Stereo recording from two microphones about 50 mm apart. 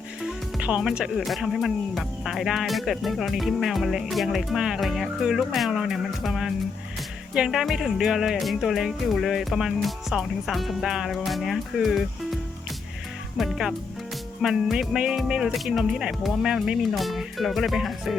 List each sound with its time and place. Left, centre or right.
0.8 s speech: centre
7.5 s speech: centre
15.8 s speech: centre
16.2 s speech: centre